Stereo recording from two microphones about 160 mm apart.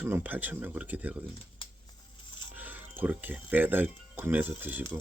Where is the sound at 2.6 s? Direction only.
10° right (ahead or behind).